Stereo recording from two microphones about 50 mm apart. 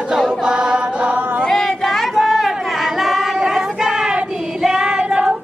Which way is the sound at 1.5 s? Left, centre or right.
Centre.